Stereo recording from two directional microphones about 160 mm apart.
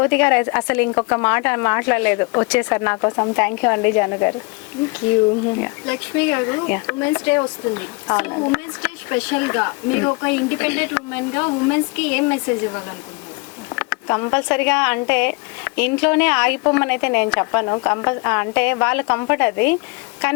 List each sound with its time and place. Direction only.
0.0 s speech: 10° left (ahead or behind)
5.5 s speech: 15° left (ahead or behind)